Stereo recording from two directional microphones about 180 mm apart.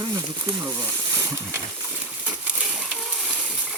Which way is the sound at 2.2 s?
5° right (ahead or behind).